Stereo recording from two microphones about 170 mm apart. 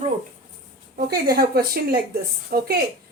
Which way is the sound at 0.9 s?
65° right (ahead or behind).